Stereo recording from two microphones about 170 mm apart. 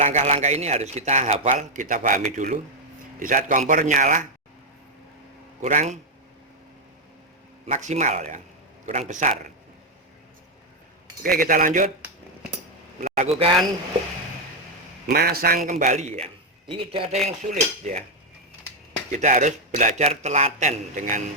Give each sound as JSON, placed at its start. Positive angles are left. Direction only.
{"t": 0.0, "sound": "a man's voice", "side_deg": -40}
{"t": 5.6, "sound": "a man's voice", "side_deg": -40}
{"t": 7.7, "sound": "a man's voice", "side_deg": -45}
{"t": 11.2, "sound": "speech", "side_deg": -55}
{"t": 13.0, "sound": "a man's voice", "side_deg": -45}
{"t": 15.0, "sound": "speech", "side_deg": -65}
{"t": 15.7, "sound": "a man's voice", "side_deg": -45}
{"t": 19.1, "sound": "a man's voice", "side_deg": -45}